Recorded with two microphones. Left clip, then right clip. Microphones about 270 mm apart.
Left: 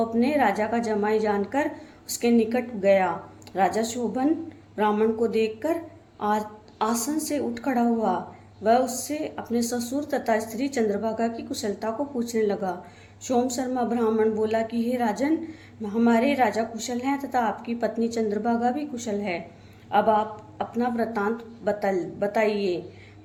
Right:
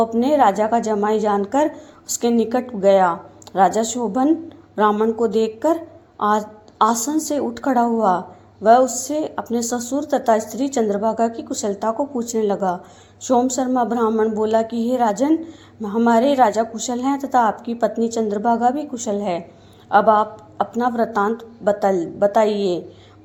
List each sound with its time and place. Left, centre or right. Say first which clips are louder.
0.0 s a woman's voice: right 7 dB; right
20.7 s a woman's voice: right 6 dB; right